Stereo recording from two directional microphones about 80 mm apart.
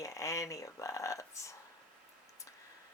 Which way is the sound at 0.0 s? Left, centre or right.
Left.